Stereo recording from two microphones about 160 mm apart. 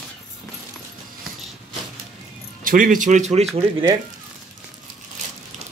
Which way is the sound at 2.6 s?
60° right (ahead or behind).